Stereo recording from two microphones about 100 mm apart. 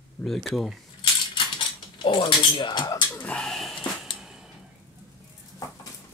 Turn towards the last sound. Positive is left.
turn(degrees=-5)  # may be behind; listen again after turning